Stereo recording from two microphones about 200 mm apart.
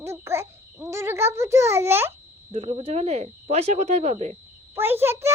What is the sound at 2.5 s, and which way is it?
Speech, 30° right (ahead or behind).